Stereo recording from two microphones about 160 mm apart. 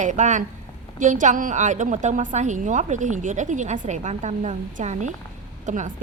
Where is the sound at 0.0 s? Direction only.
50° right (ahead or behind).